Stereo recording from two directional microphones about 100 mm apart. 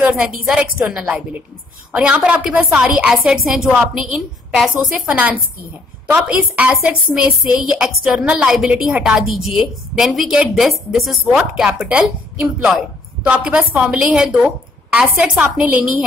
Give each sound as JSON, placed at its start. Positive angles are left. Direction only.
{"t": 0.0, "sound": "a woman's voice", "side_deg": -10}